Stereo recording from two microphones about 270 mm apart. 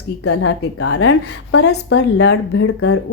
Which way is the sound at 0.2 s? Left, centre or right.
Left.